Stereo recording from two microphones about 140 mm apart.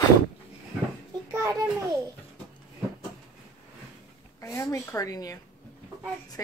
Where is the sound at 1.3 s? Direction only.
25° right (ahead or behind).